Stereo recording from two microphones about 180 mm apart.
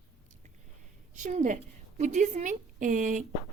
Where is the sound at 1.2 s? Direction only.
45° right (ahead or behind).